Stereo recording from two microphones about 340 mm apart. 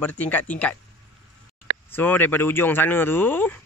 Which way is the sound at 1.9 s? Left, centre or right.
Centre.